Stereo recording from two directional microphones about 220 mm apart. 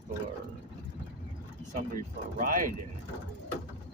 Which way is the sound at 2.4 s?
35° right (ahead or behind).